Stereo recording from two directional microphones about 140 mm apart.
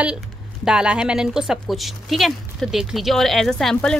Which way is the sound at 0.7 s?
5° right (ahead or behind).